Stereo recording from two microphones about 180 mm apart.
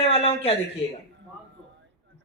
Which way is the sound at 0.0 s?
30° left (ahead or behind).